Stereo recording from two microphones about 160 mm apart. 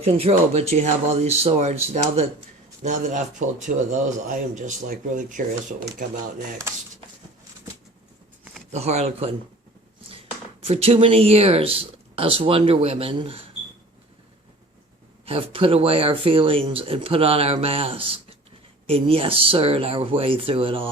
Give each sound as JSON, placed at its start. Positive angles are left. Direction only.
{"t": 0.0, "sound": "speech", "side_deg": -40}
{"t": 8.7, "sound": "speech", "side_deg": -45}
{"t": 10.0, "sound": "a sound", "side_deg": -35}
{"t": 10.7, "sound": "speech", "side_deg": -40}
{"t": 15.3, "sound": "speech", "side_deg": -35}